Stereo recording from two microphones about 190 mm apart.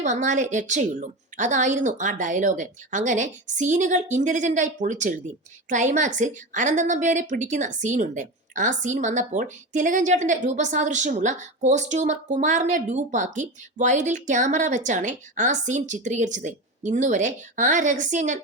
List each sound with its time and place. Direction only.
0.0 s a woman's voice: 40° right (ahead or behind)